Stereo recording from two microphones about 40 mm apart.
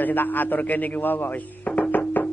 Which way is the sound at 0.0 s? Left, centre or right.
Left.